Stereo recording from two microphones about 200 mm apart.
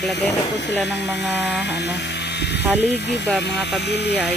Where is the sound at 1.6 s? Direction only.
60° left (ahead or behind).